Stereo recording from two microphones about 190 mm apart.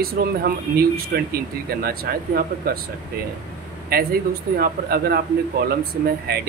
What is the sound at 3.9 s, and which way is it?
Speech, 50° right (ahead or behind).